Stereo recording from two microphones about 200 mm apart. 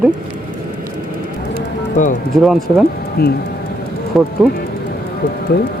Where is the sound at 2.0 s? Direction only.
40° left (ahead or behind).